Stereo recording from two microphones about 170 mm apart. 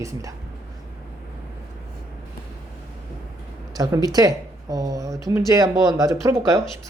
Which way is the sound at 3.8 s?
20° right (ahead or behind).